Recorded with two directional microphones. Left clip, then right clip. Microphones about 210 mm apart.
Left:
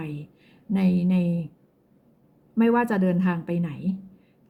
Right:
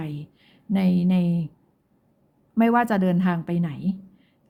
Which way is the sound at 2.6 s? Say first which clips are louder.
Right 2 dB; 25° right (ahead or behind).